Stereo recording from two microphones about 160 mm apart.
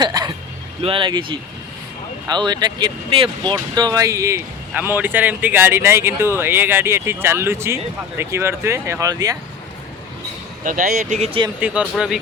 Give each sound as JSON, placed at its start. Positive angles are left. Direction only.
{"t": 0.0, "sound": "vehicle", "side_deg": -25}
{"t": 0.8, "sound": "speech", "side_deg": -35}
{"t": 10.6, "sound": "speech", "side_deg": -55}
{"t": 11.6, "sound": "speech", "side_deg": -5}